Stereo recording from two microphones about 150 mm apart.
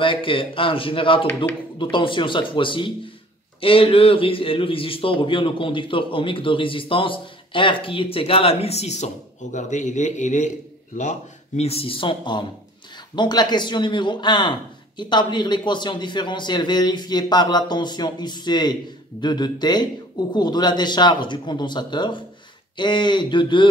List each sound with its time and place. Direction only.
0.0 s a man's voice: 35° left (ahead or behind)